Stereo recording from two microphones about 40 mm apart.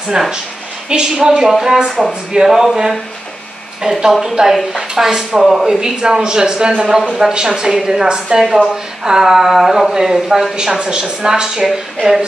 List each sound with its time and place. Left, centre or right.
0.2 s a woman's voice: centre
5.8 s a woman's voice: right